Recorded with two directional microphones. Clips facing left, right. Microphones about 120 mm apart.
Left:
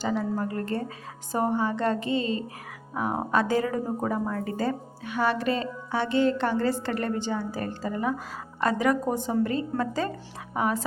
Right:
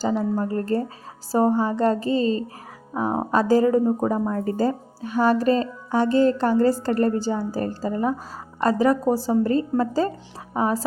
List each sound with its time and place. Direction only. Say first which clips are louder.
0.2 s speech: right 5 dB; 30° right (ahead or behind)